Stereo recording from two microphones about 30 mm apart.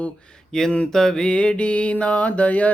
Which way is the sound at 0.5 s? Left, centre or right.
Left.